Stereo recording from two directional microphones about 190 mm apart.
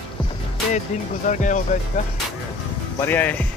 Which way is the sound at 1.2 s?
40° left (ahead or behind).